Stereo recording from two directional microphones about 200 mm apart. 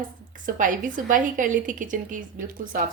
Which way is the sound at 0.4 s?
40° right (ahead or behind).